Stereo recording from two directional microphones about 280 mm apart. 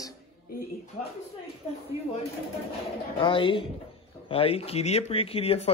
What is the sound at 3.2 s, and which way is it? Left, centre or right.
Speech, centre.